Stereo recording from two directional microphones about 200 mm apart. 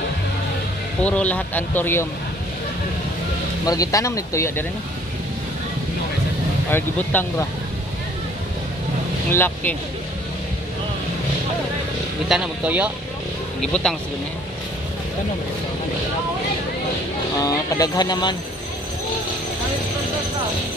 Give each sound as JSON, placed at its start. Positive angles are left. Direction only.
{"t": 1.0, "sound": "speech", "side_deg": 5}
{"t": 3.6, "sound": "speech", "side_deg": 15}
{"t": 6.7, "sound": "speech", "side_deg": 10}
{"t": 9.3, "sound": "speech", "side_deg": 10}
{"t": 12.3, "sound": "speech", "side_deg": -5}
{"t": 17.4, "sound": "speech", "side_deg": 15}